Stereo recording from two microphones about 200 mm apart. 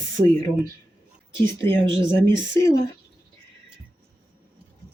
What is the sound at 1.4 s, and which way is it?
Speech, 10° left (ahead or behind).